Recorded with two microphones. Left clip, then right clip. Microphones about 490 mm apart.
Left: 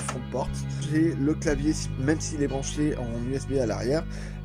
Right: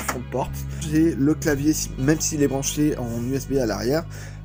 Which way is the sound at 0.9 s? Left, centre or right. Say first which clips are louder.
Right 5 dB; left.